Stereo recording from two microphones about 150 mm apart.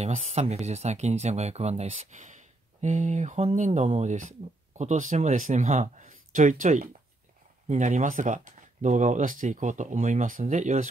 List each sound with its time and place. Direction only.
0.0 s speech: 50° right (ahead or behind)